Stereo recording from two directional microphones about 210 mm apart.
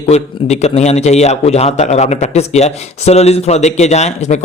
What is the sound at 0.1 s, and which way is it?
A man's voice, 30° left (ahead or behind).